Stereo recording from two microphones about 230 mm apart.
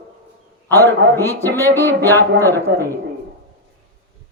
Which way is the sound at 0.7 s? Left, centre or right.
Centre.